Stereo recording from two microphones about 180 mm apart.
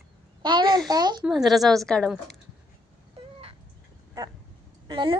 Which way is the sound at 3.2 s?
30° right (ahead or behind).